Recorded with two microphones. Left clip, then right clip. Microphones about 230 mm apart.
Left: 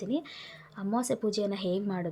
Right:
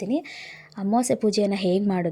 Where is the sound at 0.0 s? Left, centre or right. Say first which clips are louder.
Right 6 dB; right.